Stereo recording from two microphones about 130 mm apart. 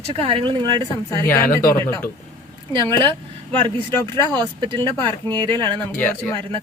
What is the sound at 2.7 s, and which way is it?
Speech, 40° right (ahead or behind).